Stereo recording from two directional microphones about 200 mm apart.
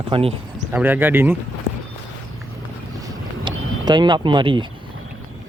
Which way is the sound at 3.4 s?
20° right (ahead or behind).